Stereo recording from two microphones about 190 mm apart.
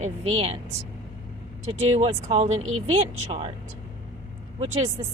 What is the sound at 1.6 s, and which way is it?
Speech, 35° right (ahead or behind).